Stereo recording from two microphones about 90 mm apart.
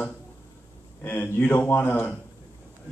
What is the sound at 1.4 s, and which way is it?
Speech, 20° left (ahead or behind).